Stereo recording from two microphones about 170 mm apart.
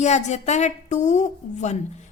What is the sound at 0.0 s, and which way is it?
A woman's voice, 40° left (ahead or behind).